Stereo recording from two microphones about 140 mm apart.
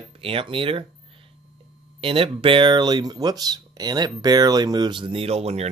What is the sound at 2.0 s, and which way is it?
Speech, 40° right (ahead or behind).